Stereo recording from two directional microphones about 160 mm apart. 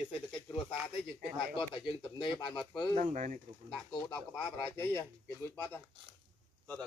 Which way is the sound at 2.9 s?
50° right (ahead or behind).